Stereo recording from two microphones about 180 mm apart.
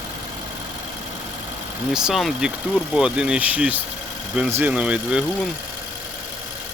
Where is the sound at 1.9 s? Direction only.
Centre (ahead or behind).